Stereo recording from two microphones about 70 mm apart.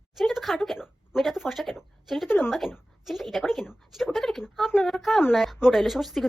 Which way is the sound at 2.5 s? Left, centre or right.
Centre.